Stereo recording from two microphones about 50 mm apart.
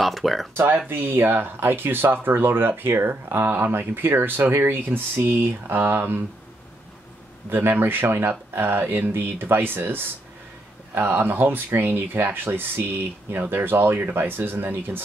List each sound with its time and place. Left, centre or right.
0.0 s speech: centre
0.8 s speech: right
7.4 s speech: right